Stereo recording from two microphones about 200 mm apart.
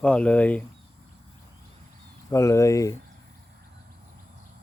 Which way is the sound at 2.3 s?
15° left (ahead or behind).